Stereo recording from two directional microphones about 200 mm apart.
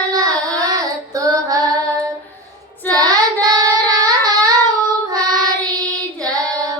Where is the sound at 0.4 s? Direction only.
20° right (ahead or behind).